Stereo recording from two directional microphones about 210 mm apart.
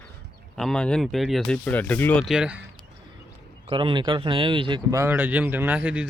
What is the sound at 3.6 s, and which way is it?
Speech, 25° right (ahead or behind).